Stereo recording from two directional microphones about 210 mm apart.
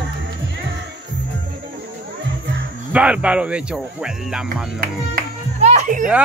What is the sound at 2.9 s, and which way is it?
Speech, 5° right (ahead or behind).